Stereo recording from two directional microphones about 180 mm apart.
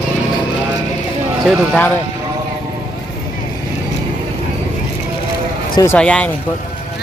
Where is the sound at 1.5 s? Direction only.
10° left (ahead or behind).